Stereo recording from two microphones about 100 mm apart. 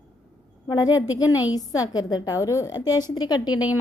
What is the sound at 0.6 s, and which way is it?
A woman's voice, 40° left (ahead or behind).